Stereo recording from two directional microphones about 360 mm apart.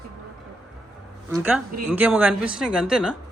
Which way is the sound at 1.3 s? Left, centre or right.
Centre.